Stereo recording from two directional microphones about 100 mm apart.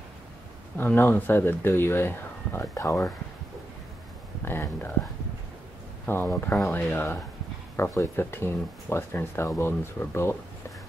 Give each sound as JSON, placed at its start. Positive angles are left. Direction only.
{"t": 0.7, "sound": "speech", "side_deg": 20}
{"t": 4.5, "sound": "speech", "side_deg": 20}
{"t": 6.1, "sound": "speech", "side_deg": 20}